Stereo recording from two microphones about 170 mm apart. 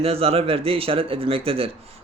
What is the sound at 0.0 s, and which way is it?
Speech, 35° right (ahead or behind).